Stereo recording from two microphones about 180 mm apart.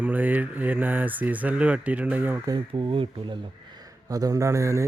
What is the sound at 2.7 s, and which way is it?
Speech, 30° right (ahead or behind).